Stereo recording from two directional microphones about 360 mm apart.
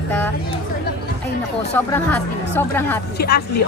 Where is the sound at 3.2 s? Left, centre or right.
Left.